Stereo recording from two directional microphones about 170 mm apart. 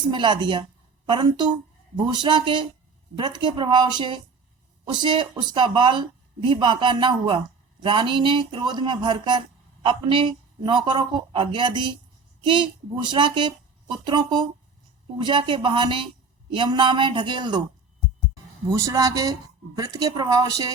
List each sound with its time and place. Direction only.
0.1 s speech: 30° right (ahead or behind)
18.7 s speech: 20° right (ahead or behind)